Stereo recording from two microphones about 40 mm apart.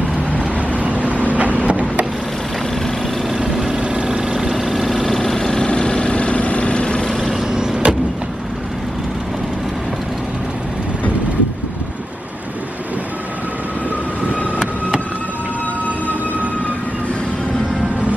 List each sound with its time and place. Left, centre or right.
0.4 s vehicle: right
3.5 s vehicle: centre
3.8 s vehicle: right
4.6 s vehicle: centre
5.7 s vehicle: left
7.1 s vehicle: centre
7.5 s vehicle: centre